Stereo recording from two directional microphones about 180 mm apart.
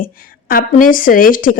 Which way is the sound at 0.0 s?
55° left (ahead or behind).